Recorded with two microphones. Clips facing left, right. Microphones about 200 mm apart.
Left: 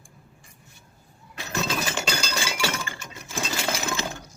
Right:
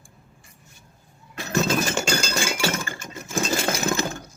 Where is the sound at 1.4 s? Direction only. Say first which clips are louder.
Right 6 dB; 45° right (ahead or behind).